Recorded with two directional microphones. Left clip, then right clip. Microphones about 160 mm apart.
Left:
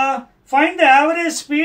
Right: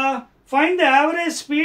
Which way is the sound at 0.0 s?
20° right (ahead or behind).